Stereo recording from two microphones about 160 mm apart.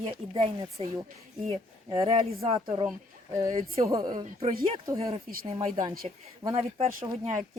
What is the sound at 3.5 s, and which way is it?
Speech, 40° right (ahead or behind).